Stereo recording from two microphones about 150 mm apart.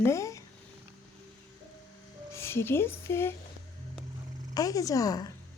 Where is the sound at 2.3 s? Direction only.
15° left (ahead or behind).